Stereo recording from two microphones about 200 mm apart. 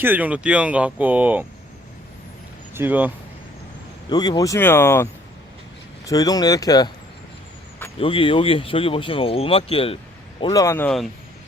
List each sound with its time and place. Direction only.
0.0 s speech: 10° right (ahead or behind)
2.7 s speech: 10° right (ahead or behind)
4.1 s speech: 20° left (ahead or behind)
6.1 s speech: 20° left (ahead or behind)
7.9 s speech: 25° left (ahead or behind)
10.4 s speech: 20° left (ahead or behind)